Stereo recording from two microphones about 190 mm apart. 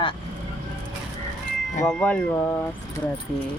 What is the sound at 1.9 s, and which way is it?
Speech, 5° left (ahead or behind).